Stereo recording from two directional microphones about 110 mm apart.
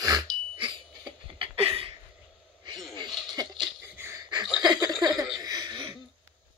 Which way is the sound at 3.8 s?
20° right (ahead or behind).